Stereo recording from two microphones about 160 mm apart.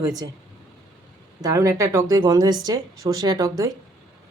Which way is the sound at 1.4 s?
20° right (ahead or behind).